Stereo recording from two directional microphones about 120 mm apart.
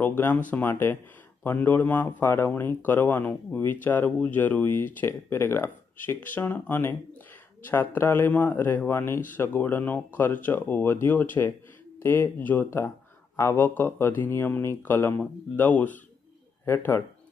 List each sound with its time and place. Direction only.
0.0 s speech: 15° left (ahead or behind)